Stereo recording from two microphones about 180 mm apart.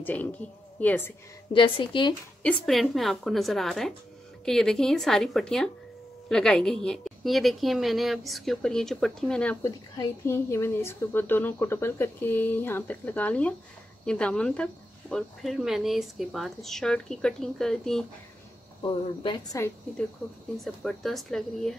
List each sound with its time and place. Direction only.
0.0 s a woman's voice: 10° left (ahead or behind)
1.5 s a woman's voice: 30° left (ahead or behind)
2.4 s a woman's voice: 5° left (ahead or behind)
18.8 s a woman's voice: 25° left (ahead or behind)
20.6 s speech: centre (ahead or behind)